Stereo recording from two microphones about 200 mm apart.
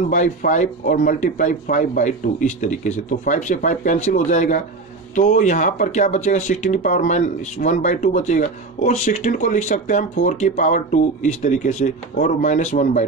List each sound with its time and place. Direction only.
0.1 s speech: 40° left (ahead or behind)